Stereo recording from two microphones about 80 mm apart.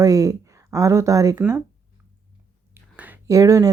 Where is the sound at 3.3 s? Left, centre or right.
Right.